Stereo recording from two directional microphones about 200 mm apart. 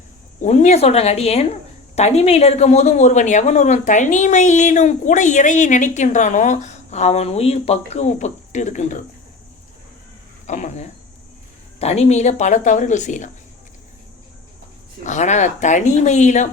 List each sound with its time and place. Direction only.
0.4 s speech: 35° left (ahead or behind)
10.4 s speech: 35° left (ahead or behind)
15.0 s speech: 35° left (ahead or behind)